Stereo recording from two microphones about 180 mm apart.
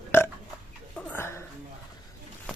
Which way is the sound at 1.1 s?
15° left (ahead or behind).